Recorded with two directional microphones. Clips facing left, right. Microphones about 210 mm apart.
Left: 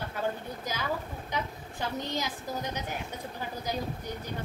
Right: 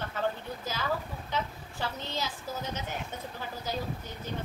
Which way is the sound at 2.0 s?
15° left (ahead or behind).